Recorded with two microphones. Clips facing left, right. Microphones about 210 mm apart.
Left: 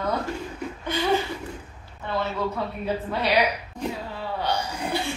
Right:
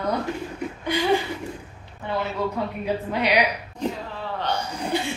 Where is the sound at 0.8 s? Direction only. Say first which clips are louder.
Right 2 dB; 15° right (ahead or behind).